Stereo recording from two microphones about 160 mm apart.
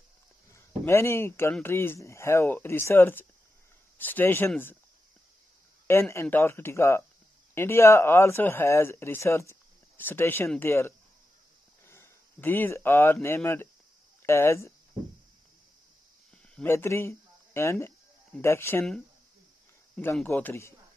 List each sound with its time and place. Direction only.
0.5 s speech: 15° left (ahead or behind)
5.9 s speech: 15° left (ahead or behind)
16.6 s speech: 15° left (ahead or behind)
20.2 s speech: 10° left (ahead or behind)